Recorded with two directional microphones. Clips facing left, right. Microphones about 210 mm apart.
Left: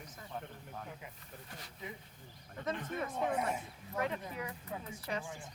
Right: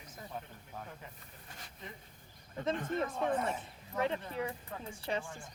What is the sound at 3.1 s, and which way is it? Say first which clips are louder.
Speech: right 1 dB; 10° left (ahead or behind).